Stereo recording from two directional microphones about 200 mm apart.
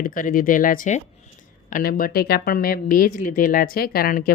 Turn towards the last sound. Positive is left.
turn(degrees=45)  # may be behind; listen again after turning